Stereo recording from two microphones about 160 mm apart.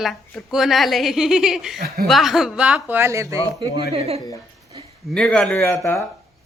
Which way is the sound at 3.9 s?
40° right (ahead or behind).